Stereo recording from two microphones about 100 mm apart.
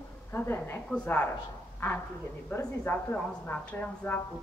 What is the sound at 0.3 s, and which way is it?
A woman's voice, 20° left (ahead or behind).